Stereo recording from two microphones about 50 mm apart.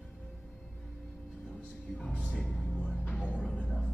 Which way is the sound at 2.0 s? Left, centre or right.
Centre.